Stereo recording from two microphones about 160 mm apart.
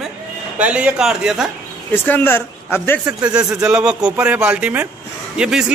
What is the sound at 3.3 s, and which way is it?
A man's voice, 5° right (ahead or behind).